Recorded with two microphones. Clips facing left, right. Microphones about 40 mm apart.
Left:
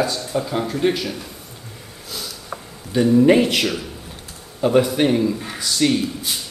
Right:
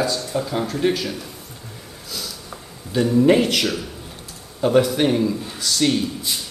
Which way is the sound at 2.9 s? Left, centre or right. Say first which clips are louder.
Left 2 dB; centre.